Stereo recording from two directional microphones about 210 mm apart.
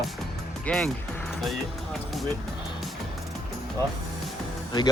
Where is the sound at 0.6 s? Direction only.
5° left (ahead or behind).